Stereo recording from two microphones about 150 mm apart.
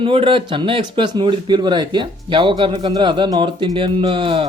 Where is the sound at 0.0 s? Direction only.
35° right (ahead or behind).